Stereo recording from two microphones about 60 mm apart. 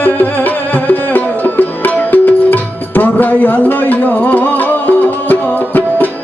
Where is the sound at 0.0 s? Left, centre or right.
Left.